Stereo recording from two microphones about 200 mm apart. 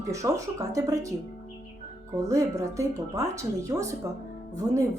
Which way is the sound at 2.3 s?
15° right (ahead or behind).